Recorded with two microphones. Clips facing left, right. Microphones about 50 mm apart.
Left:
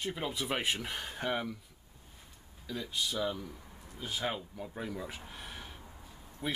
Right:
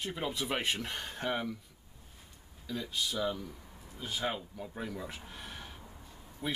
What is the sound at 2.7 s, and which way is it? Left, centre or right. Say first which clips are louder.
Speech: even; centre.